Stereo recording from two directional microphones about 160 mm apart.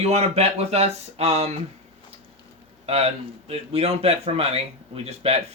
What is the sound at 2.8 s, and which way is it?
Speech, 40° right (ahead or behind).